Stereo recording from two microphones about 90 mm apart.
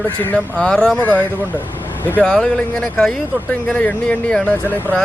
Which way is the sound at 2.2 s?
5° left (ahead or behind).